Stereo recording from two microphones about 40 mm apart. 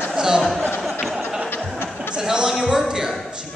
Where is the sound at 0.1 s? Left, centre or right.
Centre.